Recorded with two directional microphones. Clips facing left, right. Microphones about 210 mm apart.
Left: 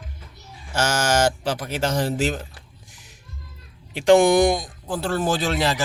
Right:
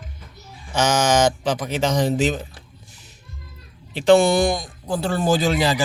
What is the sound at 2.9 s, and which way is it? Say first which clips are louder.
Music: right 2 dB; 15° left (ahead or behind).